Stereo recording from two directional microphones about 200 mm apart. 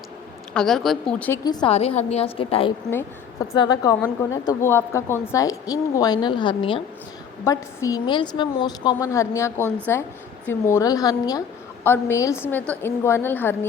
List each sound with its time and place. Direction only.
0.5 s speech: centre (ahead or behind)
1.5 s a woman's voice: 25° left (ahead or behind)